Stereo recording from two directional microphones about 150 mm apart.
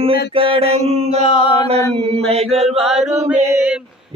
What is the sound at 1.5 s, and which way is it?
Mantra, 40° right (ahead or behind).